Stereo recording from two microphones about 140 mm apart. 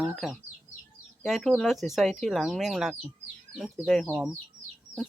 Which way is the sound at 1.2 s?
Centre (ahead or behind).